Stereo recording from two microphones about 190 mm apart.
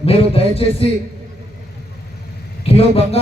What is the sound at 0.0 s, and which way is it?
Speech, 30° left (ahead or behind).